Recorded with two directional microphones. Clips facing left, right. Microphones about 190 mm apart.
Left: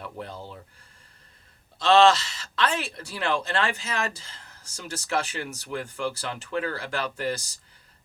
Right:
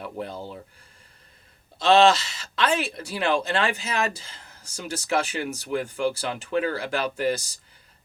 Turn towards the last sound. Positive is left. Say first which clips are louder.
# right 4 dB
turn(degrees=-15)  # may be behind; listen again after turning